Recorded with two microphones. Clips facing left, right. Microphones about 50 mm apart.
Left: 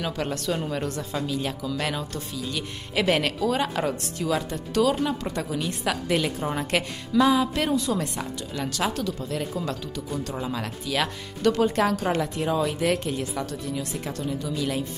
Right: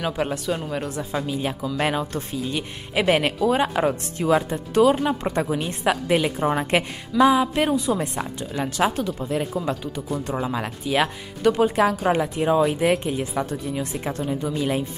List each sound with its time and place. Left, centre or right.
0.0 s speech: centre
1.2 s speech: right